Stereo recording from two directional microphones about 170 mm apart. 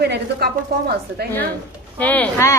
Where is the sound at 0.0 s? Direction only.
75° right (ahead or behind).